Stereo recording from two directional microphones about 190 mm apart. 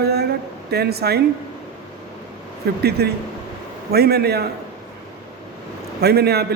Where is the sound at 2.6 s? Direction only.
55° right (ahead or behind).